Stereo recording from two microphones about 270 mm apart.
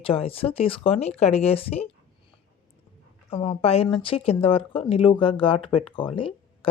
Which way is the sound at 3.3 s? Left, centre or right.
Centre.